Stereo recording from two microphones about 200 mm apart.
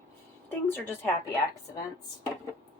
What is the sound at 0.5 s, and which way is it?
Speech, 10° left (ahead or behind).